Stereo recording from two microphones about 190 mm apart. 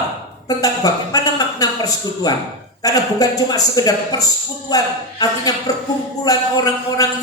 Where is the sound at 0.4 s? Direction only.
20° left (ahead or behind).